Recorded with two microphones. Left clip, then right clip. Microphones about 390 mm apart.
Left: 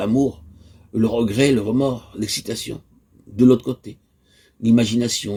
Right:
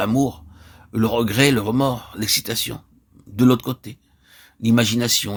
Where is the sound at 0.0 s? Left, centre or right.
Right.